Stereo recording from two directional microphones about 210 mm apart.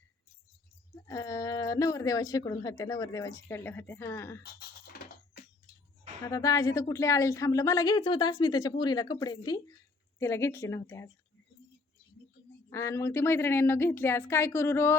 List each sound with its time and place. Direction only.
1.0 s speech: 15° left (ahead or behind)
4.4 s music: 50° left (ahead or behind)
6.2 s speech: 15° left (ahead or behind)
12.7 s speech: 15° left (ahead or behind)